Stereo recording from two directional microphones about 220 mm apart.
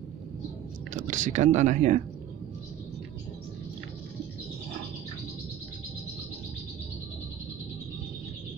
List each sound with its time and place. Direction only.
0.9 s speech: 35° right (ahead or behind)